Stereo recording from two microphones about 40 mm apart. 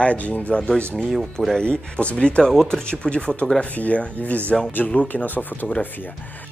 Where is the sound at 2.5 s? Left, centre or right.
Centre; by 4.4 s left.